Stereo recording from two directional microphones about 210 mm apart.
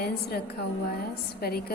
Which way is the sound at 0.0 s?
50° left (ahead or behind).